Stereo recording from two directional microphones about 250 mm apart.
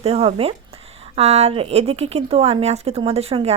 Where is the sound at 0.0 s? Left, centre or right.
Right.